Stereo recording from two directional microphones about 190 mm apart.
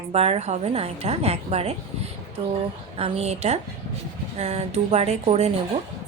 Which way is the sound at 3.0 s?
30° right (ahead or behind).